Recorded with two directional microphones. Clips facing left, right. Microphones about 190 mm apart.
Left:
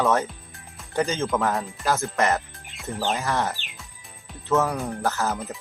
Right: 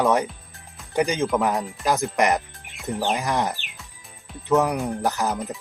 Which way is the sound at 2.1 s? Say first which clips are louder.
Right 2 dB; 15° right (ahead or behind).